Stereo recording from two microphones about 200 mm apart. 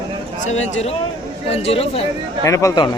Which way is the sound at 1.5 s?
30° left (ahead or behind).